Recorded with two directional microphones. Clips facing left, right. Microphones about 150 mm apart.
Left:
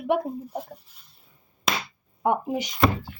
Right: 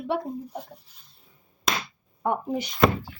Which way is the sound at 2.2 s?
15° left (ahead or behind).